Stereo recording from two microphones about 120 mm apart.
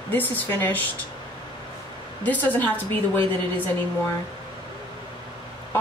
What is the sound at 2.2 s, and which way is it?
Speech, 15° left (ahead or behind).